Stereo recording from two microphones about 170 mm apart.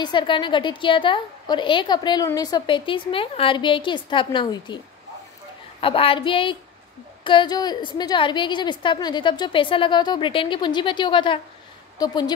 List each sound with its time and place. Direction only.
0.0 s a woman's voice: 30° left (ahead or behind)
5.8 s a woman's voice: 35° left (ahead or behind)